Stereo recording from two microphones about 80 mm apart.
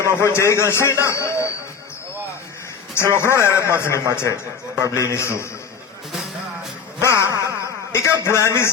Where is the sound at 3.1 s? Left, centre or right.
Left.